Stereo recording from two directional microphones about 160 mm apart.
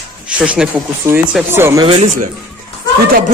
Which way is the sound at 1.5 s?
15° right (ahead or behind).